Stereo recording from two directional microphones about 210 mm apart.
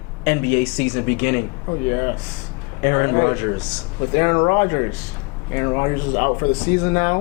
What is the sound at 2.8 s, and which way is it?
Speech, 15° left (ahead or behind).